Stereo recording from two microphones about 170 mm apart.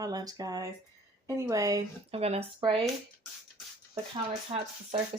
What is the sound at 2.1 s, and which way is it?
Speech, 35° right (ahead or behind).